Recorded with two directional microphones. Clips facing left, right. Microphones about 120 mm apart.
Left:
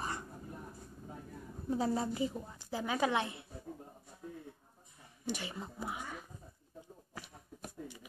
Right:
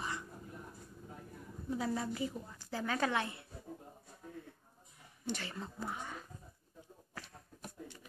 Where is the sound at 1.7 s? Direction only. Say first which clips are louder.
Left 3 dB; 30° left (ahead or behind).